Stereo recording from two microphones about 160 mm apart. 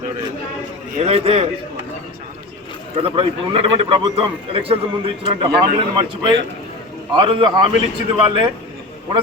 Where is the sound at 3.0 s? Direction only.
35° right (ahead or behind).